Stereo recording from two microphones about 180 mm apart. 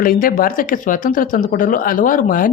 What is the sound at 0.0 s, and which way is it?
Speech, 50° left (ahead or behind).